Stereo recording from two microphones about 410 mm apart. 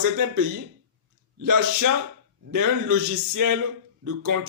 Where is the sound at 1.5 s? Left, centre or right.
Right.